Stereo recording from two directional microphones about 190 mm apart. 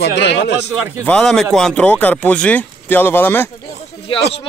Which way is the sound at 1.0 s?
5° left (ahead or behind).